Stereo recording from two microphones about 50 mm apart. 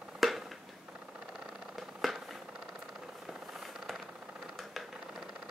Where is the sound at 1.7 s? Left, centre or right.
Centre.